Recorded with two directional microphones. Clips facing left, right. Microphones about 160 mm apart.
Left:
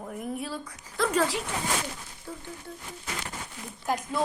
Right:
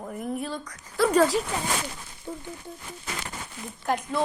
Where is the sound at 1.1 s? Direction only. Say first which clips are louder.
Right 6 dB; 40° right (ahead or behind).